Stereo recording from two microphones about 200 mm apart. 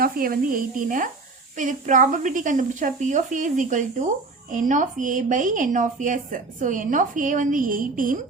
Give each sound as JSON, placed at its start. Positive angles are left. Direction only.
{"t": 0.0, "sound": "speech", "side_deg": -45}